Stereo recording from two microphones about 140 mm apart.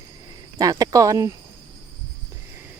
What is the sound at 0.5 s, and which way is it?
Speech, 25° right (ahead or behind).